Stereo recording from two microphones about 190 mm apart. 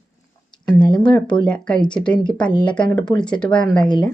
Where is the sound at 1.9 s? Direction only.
5° left (ahead or behind).